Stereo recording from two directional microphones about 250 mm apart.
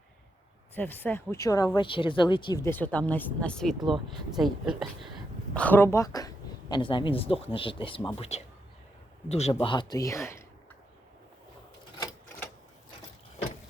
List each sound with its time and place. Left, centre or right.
0.8 s a woman's voice: centre